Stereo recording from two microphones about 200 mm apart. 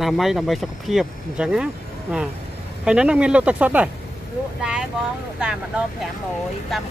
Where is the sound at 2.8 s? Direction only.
5° right (ahead or behind).